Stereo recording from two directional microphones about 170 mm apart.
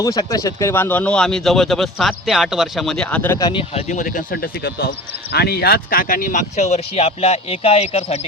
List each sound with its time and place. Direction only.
0.0 s speech: 20° left (ahead or behind)
3.6 s speech: 40° left (ahead or behind)